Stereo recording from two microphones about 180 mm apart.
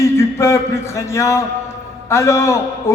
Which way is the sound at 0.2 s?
15° left (ahead or behind).